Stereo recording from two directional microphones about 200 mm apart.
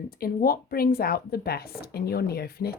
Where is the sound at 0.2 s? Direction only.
50° left (ahead or behind).